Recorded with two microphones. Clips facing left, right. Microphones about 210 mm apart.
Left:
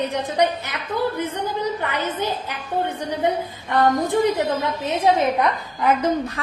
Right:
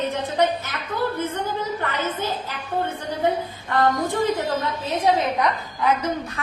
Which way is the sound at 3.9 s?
15° left (ahead or behind).